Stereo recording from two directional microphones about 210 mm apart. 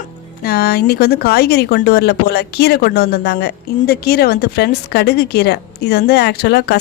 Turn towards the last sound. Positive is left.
turn(degrees=50)  # may be behind; listen again after turning